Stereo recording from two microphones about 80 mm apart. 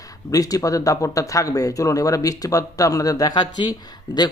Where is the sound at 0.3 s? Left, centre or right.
Left.